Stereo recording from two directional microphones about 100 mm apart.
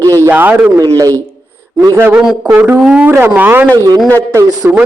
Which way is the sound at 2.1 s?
5° right (ahead or behind).